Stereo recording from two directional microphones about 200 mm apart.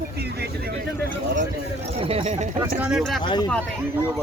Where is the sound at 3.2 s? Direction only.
20° left (ahead or behind).